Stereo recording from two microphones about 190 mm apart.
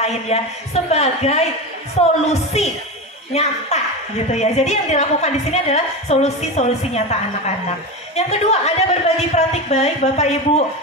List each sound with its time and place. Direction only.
0.0 s a woman's voice: 35° left (ahead or behind)